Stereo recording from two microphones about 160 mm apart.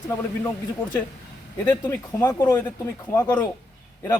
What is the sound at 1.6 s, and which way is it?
Speech, 25° left (ahead or behind).